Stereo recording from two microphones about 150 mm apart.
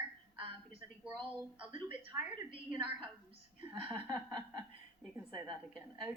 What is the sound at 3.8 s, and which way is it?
Speech, 10° right (ahead or behind).